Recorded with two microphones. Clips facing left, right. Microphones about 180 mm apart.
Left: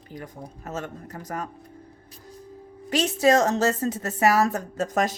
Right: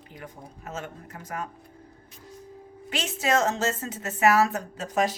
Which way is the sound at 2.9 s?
40° left (ahead or behind).